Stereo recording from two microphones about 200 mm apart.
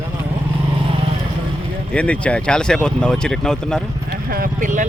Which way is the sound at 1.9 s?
5° left (ahead or behind).